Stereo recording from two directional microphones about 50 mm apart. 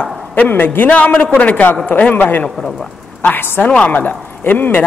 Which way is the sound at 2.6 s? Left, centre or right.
Centre.